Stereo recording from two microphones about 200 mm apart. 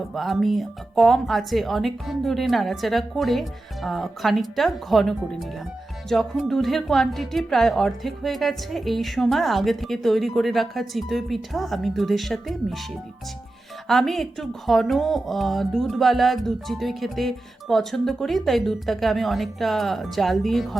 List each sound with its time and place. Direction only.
0.1 s speech: centre (ahead or behind)
13.8 s speech: centre (ahead or behind)